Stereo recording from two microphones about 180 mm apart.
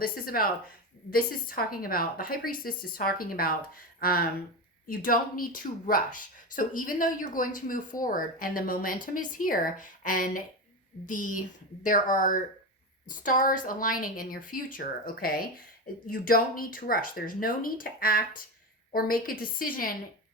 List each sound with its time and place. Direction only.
0.0 s a woman's voice: 55° left (ahead or behind)